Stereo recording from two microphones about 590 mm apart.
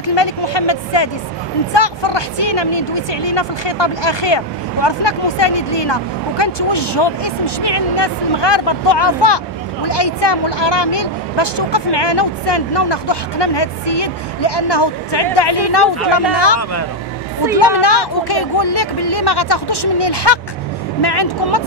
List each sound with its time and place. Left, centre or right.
0.0 s speech: left
17.6 s speech: left